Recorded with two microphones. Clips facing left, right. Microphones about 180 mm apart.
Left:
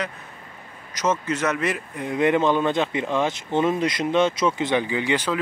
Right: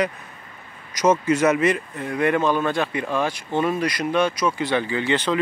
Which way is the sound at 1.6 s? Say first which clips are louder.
Right 5 dB; 5° left (ahead or behind).